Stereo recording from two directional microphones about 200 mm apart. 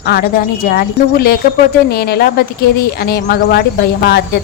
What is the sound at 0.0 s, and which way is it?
A woman's voice, 50° left (ahead or behind).